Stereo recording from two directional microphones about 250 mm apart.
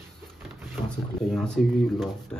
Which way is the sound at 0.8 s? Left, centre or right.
Centre.